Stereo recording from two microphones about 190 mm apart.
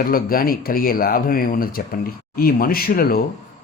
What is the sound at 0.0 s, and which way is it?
Speech, 50° left (ahead or behind).